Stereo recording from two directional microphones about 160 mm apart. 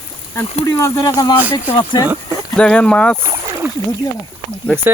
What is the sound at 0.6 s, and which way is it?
Speech, 20° left (ahead or behind).